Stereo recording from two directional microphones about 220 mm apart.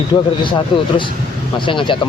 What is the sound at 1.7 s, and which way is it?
Speech, 20° left (ahead or behind).